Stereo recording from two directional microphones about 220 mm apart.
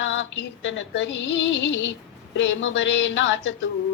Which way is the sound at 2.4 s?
60° left (ahead or behind).